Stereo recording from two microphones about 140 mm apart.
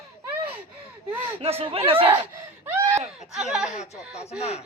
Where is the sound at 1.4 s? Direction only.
45° right (ahead or behind).